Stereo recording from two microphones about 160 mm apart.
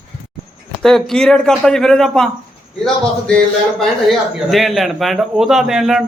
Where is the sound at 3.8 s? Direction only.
Centre (ahead or behind).